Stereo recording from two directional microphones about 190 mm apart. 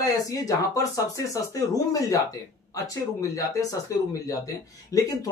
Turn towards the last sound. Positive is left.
turn(degrees=20)  # may be behind; listen again after turning